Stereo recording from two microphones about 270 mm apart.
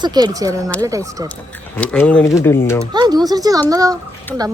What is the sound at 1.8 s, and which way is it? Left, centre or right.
Speech, centre.